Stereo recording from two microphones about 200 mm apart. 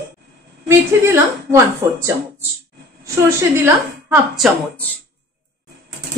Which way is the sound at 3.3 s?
10° right (ahead or behind).